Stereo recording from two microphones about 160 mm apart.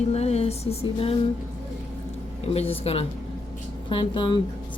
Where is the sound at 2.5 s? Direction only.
40° left (ahead or behind).